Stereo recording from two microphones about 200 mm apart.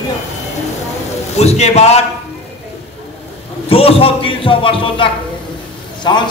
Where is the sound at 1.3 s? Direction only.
35° left (ahead or behind).